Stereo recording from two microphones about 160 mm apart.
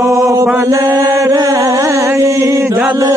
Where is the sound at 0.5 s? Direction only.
20° right (ahead or behind).